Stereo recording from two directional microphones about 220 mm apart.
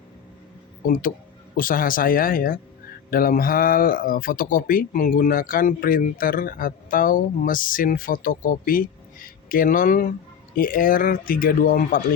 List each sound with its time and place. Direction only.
0.9 s speech: 40° left (ahead or behind)